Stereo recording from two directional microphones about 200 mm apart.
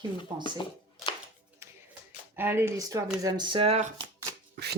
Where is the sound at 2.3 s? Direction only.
10° right (ahead or behind); by 3.9 s 30° right (ahead or behind).